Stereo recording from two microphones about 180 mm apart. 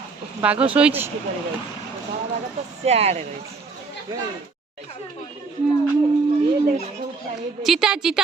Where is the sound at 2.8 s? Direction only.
35° right (ahead or behind).